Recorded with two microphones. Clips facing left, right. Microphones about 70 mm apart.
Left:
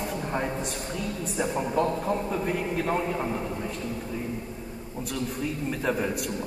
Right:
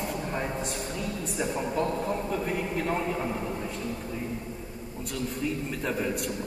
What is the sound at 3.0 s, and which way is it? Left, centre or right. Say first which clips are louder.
Speech: left 1 dB; centre.